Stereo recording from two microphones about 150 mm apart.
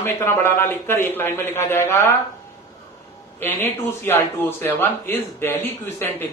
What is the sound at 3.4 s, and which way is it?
Speech, 15° left (ahead or behind).